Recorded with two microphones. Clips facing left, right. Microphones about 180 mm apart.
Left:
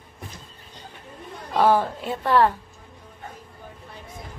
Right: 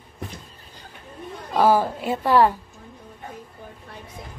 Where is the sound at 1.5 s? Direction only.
5° right (ahead or behind).